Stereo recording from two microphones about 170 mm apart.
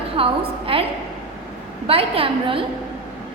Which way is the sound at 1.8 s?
35° right (ahead or behind).